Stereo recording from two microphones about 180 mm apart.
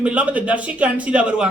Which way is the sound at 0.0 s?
5° right (ahead or behind).